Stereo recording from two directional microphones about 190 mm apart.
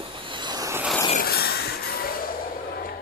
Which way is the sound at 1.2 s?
55° left (ahead or behind).